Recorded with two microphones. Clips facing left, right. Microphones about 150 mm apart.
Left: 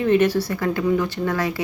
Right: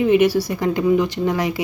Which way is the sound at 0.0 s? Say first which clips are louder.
Right 2 dB; 10° right (ahead or behind).